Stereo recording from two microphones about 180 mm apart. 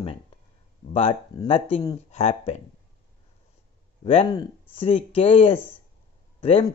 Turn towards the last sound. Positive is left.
turn(degrees=30)  # may be behind; listen again after turning